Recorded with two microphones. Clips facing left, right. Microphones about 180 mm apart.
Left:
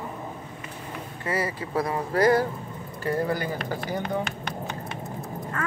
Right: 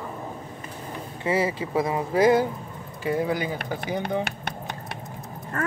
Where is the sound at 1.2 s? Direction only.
25° right (ahead or behind).